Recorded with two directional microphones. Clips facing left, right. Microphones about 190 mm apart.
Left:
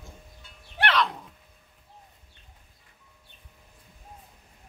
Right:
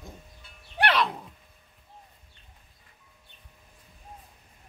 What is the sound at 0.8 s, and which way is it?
Music, 10° right (ahead or behind).